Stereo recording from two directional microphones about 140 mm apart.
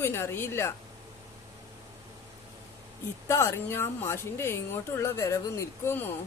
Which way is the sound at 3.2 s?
20° left (ahead or behind).